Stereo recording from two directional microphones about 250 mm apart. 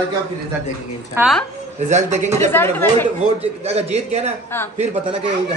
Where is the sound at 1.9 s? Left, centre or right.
Right.